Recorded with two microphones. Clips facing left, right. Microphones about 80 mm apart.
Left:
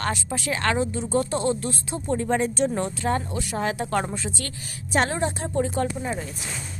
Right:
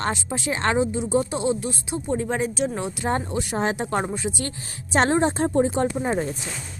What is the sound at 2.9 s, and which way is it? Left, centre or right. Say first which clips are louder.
A woman's voice: right 1 dB; right.